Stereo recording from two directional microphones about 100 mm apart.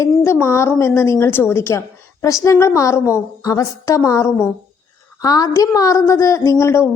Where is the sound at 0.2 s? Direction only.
25° left (ahead or behind).